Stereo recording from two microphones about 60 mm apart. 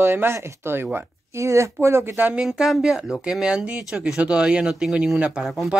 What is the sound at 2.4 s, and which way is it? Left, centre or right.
Speech, centre.